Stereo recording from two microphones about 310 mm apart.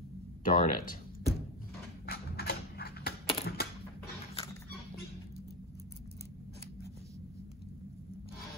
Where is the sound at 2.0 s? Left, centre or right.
Left.